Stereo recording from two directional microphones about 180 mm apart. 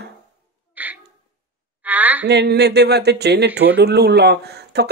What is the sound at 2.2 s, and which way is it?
Speech, 70° right (ahead or behind).